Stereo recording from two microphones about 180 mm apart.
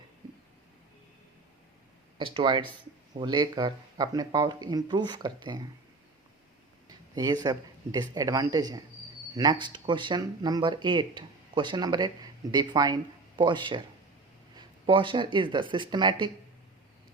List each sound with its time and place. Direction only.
2.1 s speech: 30° right (ahead or behind)
6.8 s a sound: 20° right (ahead or behind)
7.9 s speech: 20° right (ahead or behind)